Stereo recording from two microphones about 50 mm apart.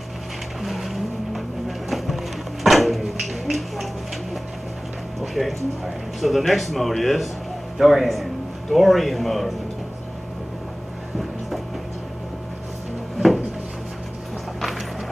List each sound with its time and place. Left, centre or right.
0.6 s boat: centre
1.9 s music: centre
5.2 s a man's voice: centre